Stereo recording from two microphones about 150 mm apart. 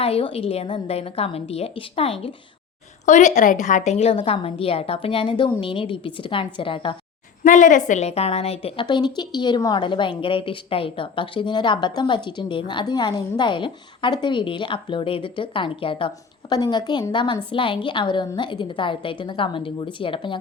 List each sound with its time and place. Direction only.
0.0 s a woman's voice: 40° left (ahead or behind)
3.1 s a woman's voice: 55° left (ahead or behind); by 6.9 s 35° left (ahead or behind)
7.4 s a woman's voice: 60° left (ahead or behind); by 20.4 s 35° left (ahead or behind)